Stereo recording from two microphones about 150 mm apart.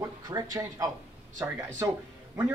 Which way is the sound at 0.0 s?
25° right (ahead or behind).